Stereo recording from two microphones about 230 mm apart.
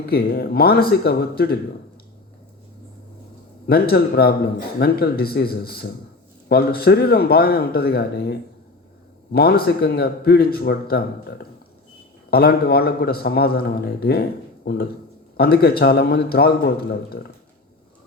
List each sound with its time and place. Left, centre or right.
0.0 s a man's voice: left
3.7 s a man's voice: left